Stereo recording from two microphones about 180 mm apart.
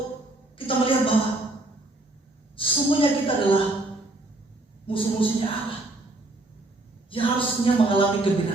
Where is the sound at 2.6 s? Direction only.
30° left (ahead or behind).